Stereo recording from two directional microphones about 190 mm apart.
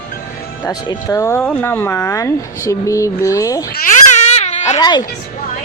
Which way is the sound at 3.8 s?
40° left (ahead or behind).